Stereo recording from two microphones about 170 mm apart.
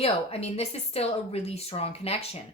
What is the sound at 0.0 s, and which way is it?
A woman's voice, 35° left (ahead or behind).